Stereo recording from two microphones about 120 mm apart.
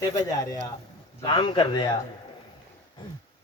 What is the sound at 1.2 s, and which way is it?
Speech, 40° left (ahead or behind).